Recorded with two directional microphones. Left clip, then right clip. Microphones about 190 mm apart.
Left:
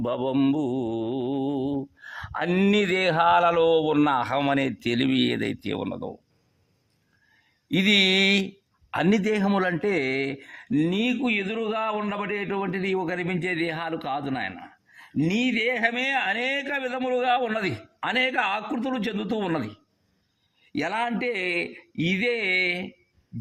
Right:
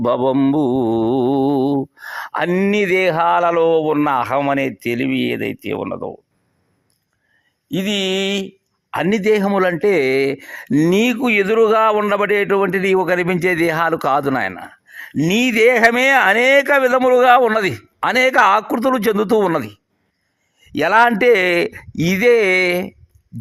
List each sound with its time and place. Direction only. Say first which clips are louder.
0.0 s a man's voice: right 11 dB; 30° right (ahead or behind)
0.5 s mantra: right 10 dB; 30° right (ahead or behind)
2.6 s speech: right 6 dB; 15° right (ahead or behind)
7.7 s a man's voice: even; 10° right (ahead or behind); by 17.6 s 40° right (ahead or behind)
17.6 s a man's voice: right 10 dB; 30° right (ahead or behind); by 19.4 s 45° right (ahead or behind)
19.4 s speech: right 11 dB; 30° right (ahead or behind)
20.7 s a man's voice: right 14 dB; 35° right (ahead or behind)